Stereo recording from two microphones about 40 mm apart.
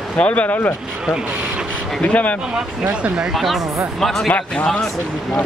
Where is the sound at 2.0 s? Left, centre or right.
Left.